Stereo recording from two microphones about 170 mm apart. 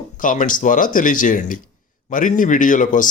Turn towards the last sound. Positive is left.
turn(degrees=50)  # may be behind; listen again after turning